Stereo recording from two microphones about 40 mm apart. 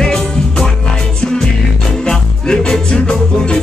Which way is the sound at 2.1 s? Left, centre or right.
Centre.